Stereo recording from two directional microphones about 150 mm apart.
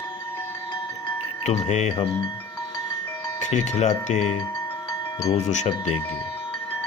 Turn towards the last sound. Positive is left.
turn(degrees=45)  # may be behind; listen again after turning